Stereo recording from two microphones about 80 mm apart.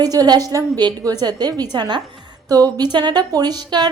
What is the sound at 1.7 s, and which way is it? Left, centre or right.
Speech, right.